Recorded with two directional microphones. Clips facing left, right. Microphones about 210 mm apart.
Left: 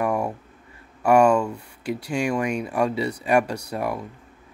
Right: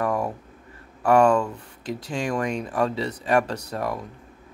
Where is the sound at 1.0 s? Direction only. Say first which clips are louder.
Left 1 dB; 10° left (ahead or behind).